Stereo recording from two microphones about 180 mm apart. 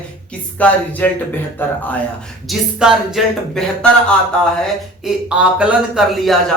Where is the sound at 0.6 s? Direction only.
10° left (ahead or behind).